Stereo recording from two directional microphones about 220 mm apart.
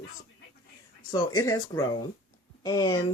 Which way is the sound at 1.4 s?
15° left (ahead or behind).